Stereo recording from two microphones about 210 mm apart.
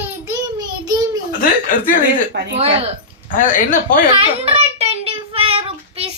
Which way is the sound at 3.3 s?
40° left (ahead or behind).